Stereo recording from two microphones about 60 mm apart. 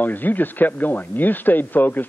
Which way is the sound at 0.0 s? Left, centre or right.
Left.